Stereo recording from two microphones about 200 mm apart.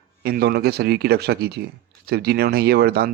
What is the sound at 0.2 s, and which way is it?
Speech, 55° right (ahead or behind).